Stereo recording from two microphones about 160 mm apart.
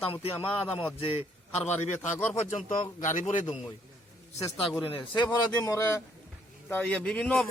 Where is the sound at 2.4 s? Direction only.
50° left (ahead or behind).